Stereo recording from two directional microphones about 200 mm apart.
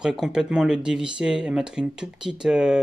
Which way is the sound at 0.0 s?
Centre (ahead or behind).